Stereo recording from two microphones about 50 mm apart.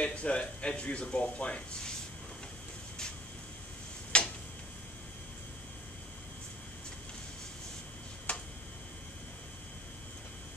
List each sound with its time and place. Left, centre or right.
0.0 s speech: left
4.1 s tick-tock: centre
8.3 s tick-tock: left